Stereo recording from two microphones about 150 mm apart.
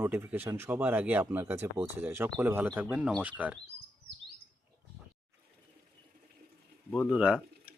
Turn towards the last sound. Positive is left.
turn(degrees=-5)  # may be behind; listen again after turning